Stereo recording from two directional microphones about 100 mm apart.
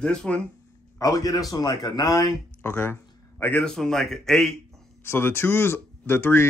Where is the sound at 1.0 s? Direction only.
35° left (ahead or behind).